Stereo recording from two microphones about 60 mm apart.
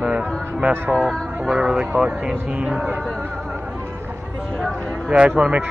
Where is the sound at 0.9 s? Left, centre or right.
Centre.